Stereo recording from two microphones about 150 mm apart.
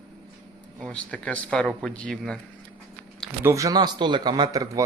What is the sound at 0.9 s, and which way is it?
Speech, 5° left (ahead or behind).